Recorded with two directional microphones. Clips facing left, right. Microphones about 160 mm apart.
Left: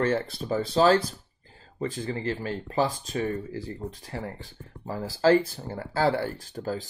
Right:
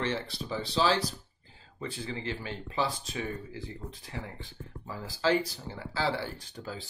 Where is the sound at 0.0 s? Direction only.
50° left (ahead or behind).